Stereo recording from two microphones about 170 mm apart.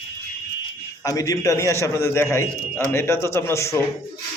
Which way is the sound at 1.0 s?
20° left (ahead or behind).